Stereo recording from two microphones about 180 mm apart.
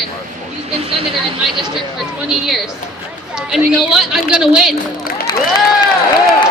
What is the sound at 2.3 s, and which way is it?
A woman's voice, centre (ahead or behind).